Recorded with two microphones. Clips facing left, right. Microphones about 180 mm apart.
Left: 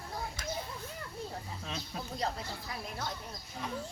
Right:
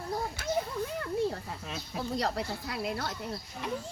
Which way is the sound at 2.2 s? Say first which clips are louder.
Right 4 dB; 75° right (ahead or behind).